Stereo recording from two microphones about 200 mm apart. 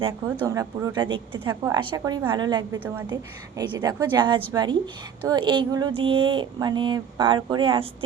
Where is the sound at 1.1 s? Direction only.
25° right (ahead or behind).